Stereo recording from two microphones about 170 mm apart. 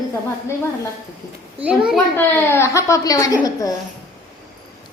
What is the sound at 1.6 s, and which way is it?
Speech, 5° right (ahead or behind).